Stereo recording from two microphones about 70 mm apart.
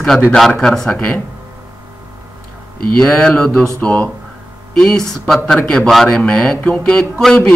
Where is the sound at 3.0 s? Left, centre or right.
Centre.